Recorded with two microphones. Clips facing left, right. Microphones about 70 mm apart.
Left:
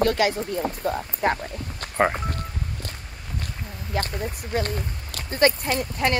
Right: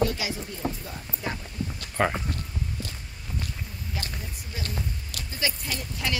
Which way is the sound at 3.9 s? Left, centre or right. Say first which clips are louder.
Left 11 dB; left.